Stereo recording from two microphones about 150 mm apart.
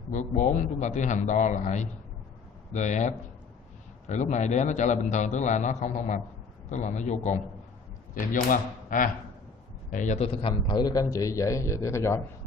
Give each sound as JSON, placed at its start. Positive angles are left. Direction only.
{"t": 0.1, "sound": "a man's voice", "side_deg": 55}
{"t": 8.1, "sound": "a man's voice", "side_deg": 65}